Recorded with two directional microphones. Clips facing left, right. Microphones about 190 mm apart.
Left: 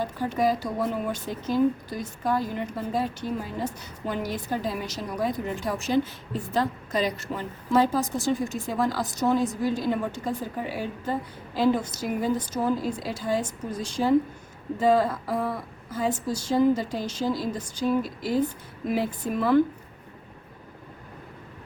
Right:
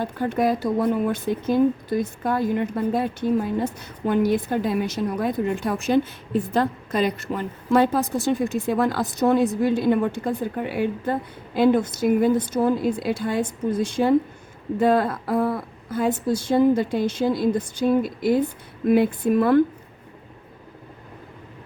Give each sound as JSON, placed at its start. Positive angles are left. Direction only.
{"t": 0.0, "sound": "a woman's voice", "side_deg": -55}